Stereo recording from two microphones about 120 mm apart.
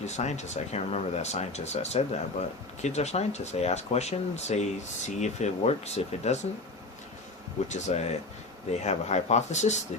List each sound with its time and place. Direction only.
0.0 s speech: 70° left (ahead or behind)
7.7 s speech: 70° left (ahead or behind)